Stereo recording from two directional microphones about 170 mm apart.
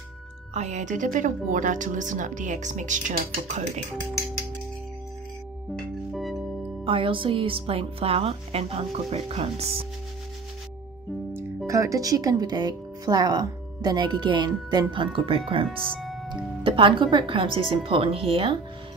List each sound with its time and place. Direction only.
0.6 s speech: 45° right (ahead or behind)
6.1 s music: centre (ahead or behind)
6.8 s speech: 30° right (ahead or behind)
11.3 s speech: 20° right (ahead or behind)
15.7 s music: 5° left (ahead or behind)
16.6 s speech: 30° right (ahead or behind)